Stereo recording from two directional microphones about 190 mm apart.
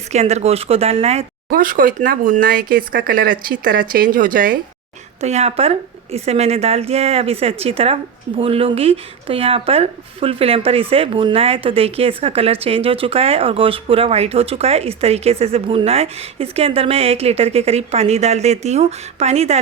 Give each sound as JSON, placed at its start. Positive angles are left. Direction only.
{"t": 0.1, "sound": "speech", "side_deg": -35}
{"t": 1.5, "sound": "speech", "side_deg": -45}
{"t": 5.2, "sound": "speech", "side_deg": -35}